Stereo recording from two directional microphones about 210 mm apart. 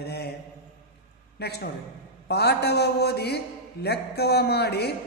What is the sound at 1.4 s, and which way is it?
A man's voice, 50° left (ahead or behind).